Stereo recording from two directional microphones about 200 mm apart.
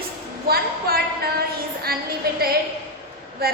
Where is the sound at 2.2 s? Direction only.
50° right (ahead or behind).